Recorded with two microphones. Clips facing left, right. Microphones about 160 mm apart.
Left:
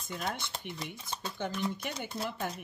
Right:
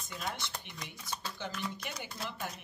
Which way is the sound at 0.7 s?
25° left (ahead or behind).